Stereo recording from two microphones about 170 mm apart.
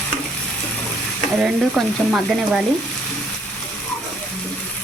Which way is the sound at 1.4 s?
Centre (ahead or behind).